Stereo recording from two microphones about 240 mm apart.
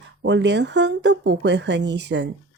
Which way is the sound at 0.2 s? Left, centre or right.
Right.